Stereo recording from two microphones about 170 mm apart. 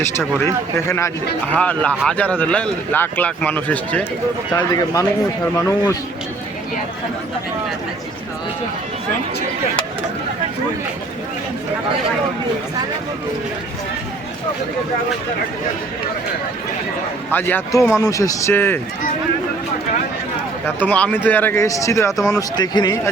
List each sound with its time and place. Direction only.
0.0 s speech: 15° left (ahead or behind)
4.5 s speech: 20° left (ahead or behind)
17.3 s speech: 10° left (ahead or behind)
20.7 s speech: 10° left (ahead or behind)